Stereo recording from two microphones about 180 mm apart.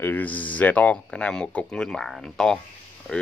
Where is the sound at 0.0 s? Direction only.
10° left (ahead or behind).